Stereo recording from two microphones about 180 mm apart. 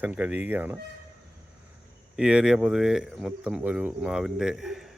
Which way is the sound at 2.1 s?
5° right (ahead or behind).